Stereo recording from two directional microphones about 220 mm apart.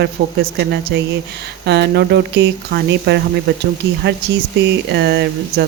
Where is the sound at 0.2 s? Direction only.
40° right (ahead or behind).